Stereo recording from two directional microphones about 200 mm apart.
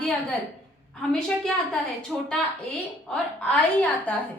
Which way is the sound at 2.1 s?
Centre (ahead or behind).